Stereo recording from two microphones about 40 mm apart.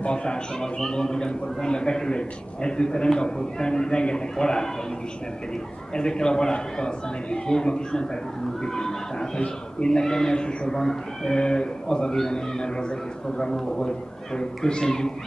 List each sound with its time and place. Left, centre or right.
0.0 s a man's voice: left
5.9 s a man's voice: centre